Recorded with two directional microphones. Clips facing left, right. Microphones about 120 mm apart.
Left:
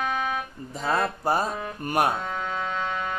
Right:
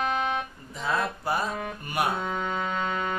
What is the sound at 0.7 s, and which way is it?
Speech, 40° left (ahead or behind).